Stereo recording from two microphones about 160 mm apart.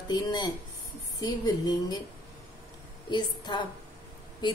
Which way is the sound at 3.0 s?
30° left (ahead or behind).